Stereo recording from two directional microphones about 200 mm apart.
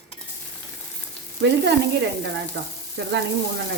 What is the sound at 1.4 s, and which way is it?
Speech, 60° right (ahead or behind).